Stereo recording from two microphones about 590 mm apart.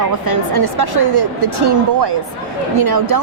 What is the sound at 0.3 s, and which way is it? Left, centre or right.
A woman's voice, right.